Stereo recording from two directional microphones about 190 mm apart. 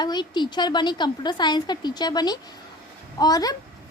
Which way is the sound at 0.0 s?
20° left (ahead or behind).